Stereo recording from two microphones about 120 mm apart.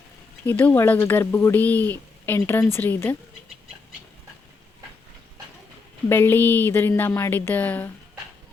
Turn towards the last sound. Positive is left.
turn(degrees=15)  # may be behind; listen again after turning